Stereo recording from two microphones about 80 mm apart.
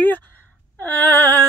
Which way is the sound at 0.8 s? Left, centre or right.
Left.